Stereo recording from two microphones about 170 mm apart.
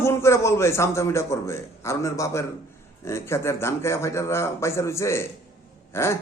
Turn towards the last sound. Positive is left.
turn(degrees=15)  # may be behind; listen again after turning